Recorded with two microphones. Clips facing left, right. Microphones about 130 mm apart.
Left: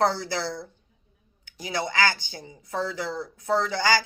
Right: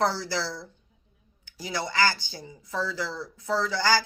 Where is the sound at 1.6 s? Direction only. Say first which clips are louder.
Left 1 dB; 20° left (ahead or behind).